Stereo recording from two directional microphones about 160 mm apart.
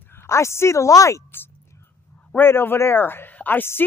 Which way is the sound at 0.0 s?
15° left (ahead or behind).